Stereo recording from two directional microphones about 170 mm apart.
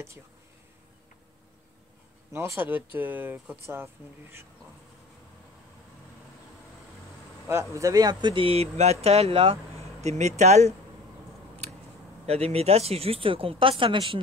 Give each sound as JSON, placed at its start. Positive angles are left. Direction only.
{"t": 2.3, "sound": "speech", "side_deg": -15}
{"t": 7.4, "sound": "speech", "side_deg": -15}
{"t": 12.3, "sound": "speech", "side_deg": -35}